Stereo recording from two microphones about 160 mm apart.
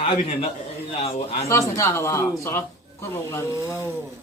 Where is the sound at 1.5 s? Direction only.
15° left (ahead or behind).